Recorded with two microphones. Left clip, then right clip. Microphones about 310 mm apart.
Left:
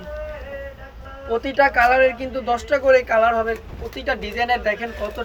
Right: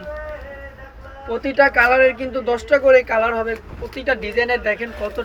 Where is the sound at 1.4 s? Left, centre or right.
Left.